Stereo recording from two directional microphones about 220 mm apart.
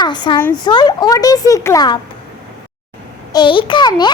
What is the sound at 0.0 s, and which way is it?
A child's voice, 20° left (ahead or behind).